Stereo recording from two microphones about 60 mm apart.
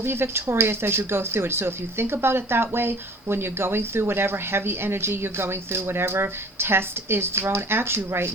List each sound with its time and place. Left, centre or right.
0.0 s speech: right